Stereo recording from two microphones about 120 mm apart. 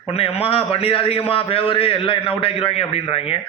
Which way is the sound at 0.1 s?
55° left (ahead or behind).